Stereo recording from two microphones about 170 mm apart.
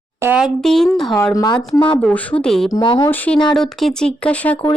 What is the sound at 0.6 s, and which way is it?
Speech, centre (ahead or behind).